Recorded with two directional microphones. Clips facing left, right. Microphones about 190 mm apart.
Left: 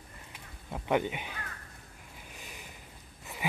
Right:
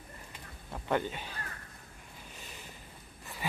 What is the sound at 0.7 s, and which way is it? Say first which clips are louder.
Speech: left 3 dB; 15° left (ahead or behind).